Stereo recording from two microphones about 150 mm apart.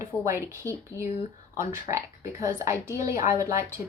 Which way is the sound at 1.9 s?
50° left (ahead or behind).